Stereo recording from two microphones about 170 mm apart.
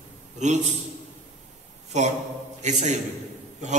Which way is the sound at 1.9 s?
45° right (ahead or behind).